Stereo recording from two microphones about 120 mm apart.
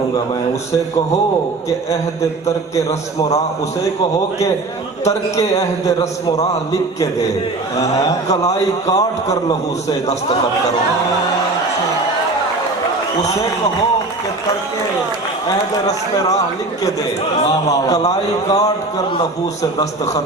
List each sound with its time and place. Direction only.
5.0 s a man's voice: 30° left (ahead or behind)
8.3 s a man's voice: 30° left (ahead or behind)
17.7 s a man's voice: 30° left (ahead or behind)